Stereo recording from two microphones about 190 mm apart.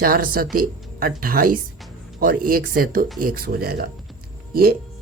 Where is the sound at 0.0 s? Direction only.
50° right (ahead or behind).